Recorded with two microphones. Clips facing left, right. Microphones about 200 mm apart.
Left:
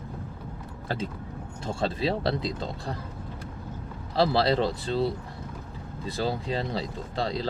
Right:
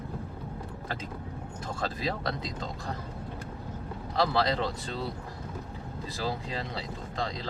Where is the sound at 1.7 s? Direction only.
25° left (ahead or behind).